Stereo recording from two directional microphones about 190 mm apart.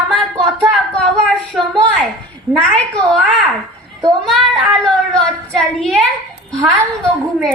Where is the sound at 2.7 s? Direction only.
5° left (ahead or behind).